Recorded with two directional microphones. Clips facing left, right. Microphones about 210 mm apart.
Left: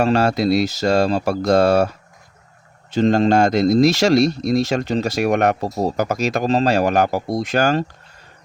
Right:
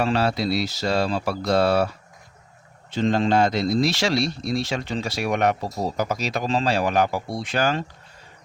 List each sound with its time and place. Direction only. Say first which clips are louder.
0.0 s speech: left 5 dB; 45° left (ahead or behind)
2.9 s speech: left 5 dB; 45° left (ahead or behind)